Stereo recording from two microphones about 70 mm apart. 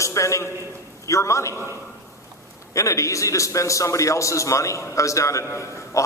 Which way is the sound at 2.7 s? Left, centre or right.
Left.